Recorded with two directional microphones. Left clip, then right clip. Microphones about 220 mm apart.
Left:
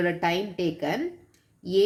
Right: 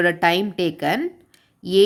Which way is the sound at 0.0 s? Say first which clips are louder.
Right 8 dB; 45° right (ahead or behind).